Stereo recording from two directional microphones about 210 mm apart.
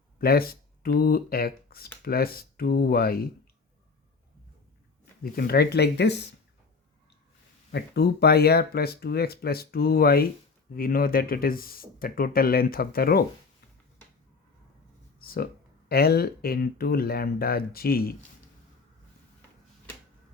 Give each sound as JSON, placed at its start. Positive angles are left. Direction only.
{"t": 0.2, "sound": "speech", "side_deg": 45}
{"t": 5.2, "sound": "speech", "side_deg": 45}
{"t": 7.7, "sound": "speech", "side_deg": 50}
{"t": 15.2, "sound": "speech", "side_deg": 45}